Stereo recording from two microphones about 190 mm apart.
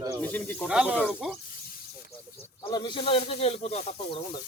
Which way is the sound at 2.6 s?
25° left (ahead or behind).